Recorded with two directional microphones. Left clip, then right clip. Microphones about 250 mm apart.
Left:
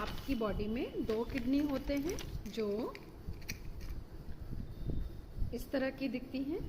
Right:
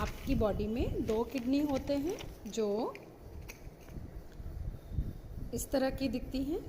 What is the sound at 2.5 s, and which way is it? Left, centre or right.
Speech, centre.